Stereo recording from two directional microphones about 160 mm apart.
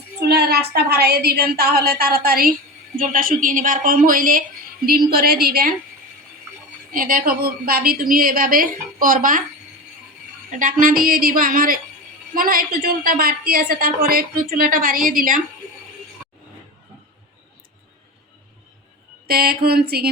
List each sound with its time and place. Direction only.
0.3 s a woman's voice: 85° right; by 4.4 s 60° right (ahead or behind)
4.9 s a woman's voice: 70° right (ahead or behind)
6.9 s a woman's voice: 60° right (ahead or behind)
10.6 s a woman's voice: 60° right (ahead or behind)
19.3 s a woman's voice: 75° right (ahead or behind)